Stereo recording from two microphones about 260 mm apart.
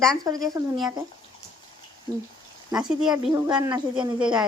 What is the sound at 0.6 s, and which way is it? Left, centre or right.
Speech, centre.